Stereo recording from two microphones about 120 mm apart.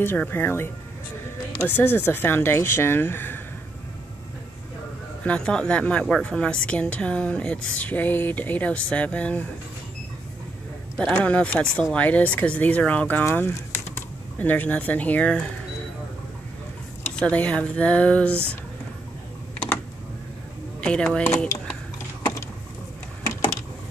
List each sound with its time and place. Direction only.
0.0 s speech: 15° left (ahead or behind)
1.8 s speech: 20° left (ahead or behind)
5.2 s speech: 10° left (ahead or behind)
11.0 s speech: 5° left (ahead or behind)
17.2 s speech: 10° left (ahead or behind)
18.3 s speech: 20° right (ahead or behind)
20.8 s speech: 5° left (ahead or behind)